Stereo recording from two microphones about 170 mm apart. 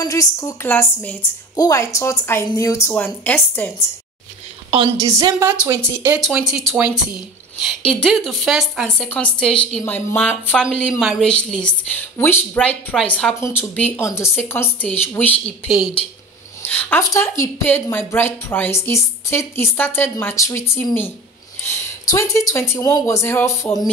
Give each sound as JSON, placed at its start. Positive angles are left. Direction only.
{"t": 0.0, "sound": "a woman's voice", "side_deg": 20}
{"t": 4.6, "sound": "a woman's voice", "side_deg": -25}
{"t": 16.6, "sound": "a woman's voice", "side_deg": 10}